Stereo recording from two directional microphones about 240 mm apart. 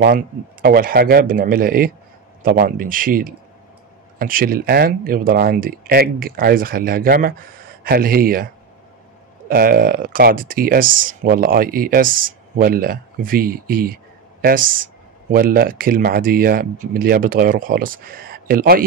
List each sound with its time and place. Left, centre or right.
0.0 s speech: right
9.5 s speech: right